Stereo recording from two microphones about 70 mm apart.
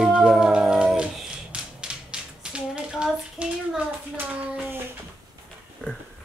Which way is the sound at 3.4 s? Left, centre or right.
Centre.